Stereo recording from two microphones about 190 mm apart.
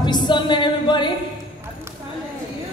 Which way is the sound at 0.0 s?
25° left (ahead or behind).